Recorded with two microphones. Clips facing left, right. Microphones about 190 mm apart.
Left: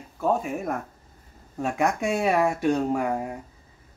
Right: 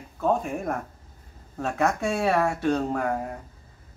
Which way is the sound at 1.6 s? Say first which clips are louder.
Even; 15° left (ahead or behind).